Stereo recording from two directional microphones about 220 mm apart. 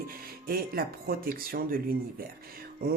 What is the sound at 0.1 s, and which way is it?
Speech, 40° right (ahead or behind).